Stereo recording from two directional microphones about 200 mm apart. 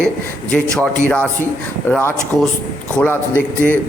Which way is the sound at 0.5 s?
5° left (ahead or behind).